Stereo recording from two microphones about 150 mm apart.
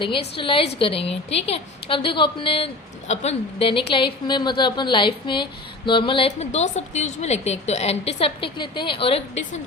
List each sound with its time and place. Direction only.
0.3 s a woman's voice: 35° left (ahead or behind)